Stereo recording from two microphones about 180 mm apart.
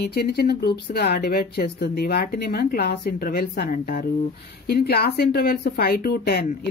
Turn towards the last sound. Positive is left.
turn(degrees=60)  # may be behind; listen again after turning